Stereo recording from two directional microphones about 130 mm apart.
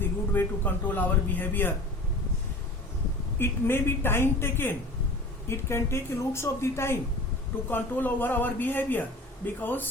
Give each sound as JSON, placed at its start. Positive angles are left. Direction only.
{"t": 0.3, "sound": "a man's voice", "side_deg": 15}
{"t": 3.3, "sound": "a man's voice", "side_deg": 20}